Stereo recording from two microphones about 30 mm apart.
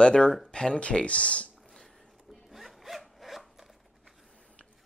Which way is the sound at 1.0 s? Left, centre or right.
Left.